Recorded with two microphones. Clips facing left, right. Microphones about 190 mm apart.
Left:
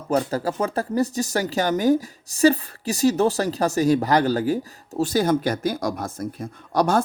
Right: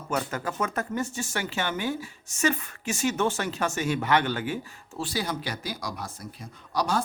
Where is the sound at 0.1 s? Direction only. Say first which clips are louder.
Left 8 dB; 35° left (ahead or behind).